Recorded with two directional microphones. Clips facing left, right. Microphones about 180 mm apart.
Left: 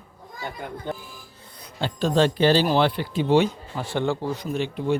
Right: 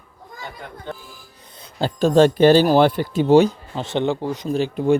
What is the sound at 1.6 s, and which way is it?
Speech, 40° right (ahead or behind).